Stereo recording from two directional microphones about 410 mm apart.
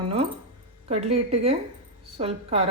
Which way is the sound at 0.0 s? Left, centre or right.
Centre.